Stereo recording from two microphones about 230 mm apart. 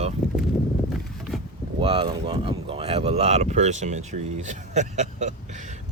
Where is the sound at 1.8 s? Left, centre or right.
Right.